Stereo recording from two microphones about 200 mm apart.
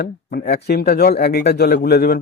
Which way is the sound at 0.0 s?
50° left (ahead or behind).